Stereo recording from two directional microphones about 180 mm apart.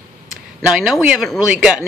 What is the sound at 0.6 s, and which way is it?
Speech, 5° right (ahead or behind).